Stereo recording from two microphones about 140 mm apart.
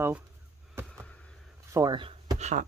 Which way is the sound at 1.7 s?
30° right (ahead or behind).